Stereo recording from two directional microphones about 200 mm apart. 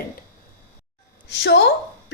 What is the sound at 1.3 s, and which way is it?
Speech, 60° left (ahead or behind).